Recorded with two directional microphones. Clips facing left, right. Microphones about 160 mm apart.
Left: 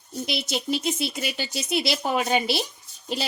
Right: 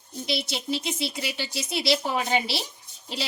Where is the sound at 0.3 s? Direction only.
50° left (ahead or behind).